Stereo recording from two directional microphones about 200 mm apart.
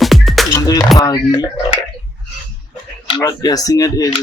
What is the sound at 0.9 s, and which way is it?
Speech, 20° left (ahead or behind).